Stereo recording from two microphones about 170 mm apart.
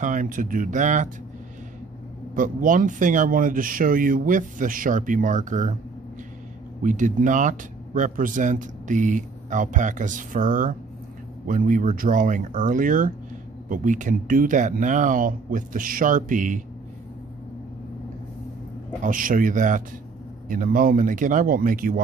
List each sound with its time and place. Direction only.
0.0 s speech: 50° right (ahead or behind)
2.3 s speech: 50° right (ahead or behind)
6.8 s speech: 50° right (ahead or behind)
19.0 s speech: 55° right (ahead or behind)